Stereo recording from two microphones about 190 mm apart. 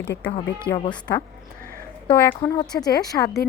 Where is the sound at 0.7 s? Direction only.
60° left (ahead or behind).